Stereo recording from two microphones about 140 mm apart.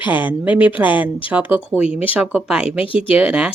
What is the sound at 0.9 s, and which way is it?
Speech, 35° left (ahead or behind).